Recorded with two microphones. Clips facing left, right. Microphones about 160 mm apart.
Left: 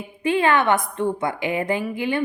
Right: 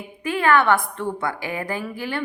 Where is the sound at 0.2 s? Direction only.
25° left (ahead or behind).